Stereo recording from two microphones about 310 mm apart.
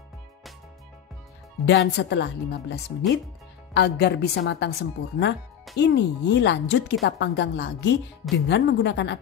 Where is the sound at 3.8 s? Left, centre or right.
Left.